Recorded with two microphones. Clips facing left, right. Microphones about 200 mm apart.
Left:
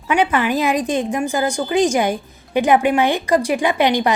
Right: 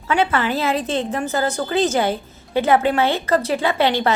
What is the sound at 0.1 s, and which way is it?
A woman's voice, 15° left (ahead or behind).